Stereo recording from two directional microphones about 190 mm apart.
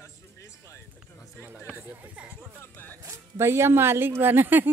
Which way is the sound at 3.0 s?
15° right (ahead or behind).